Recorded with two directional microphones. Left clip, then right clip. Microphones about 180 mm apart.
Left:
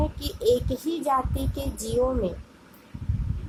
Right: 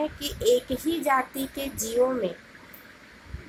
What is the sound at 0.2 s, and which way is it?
Child singing, 25° left (ahead or behind).